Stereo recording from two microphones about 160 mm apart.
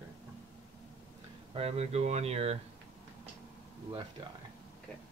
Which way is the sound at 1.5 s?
40° right (ahead or behind).